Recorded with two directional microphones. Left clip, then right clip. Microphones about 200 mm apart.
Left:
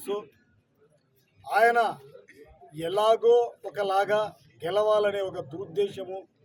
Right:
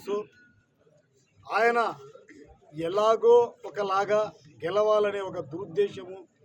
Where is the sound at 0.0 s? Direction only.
5° left (ahead or behind).